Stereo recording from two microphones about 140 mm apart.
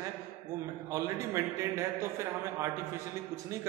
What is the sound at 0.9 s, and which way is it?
A man's voice, 20° right (ahead or behind).